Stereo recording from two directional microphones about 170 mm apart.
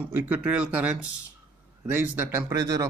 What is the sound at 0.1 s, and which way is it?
Speech, 10° right (ahead or behind).